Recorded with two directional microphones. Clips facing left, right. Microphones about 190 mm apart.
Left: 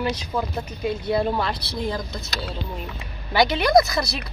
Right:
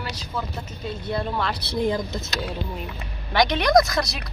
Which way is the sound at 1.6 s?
15° right (ahead or behind).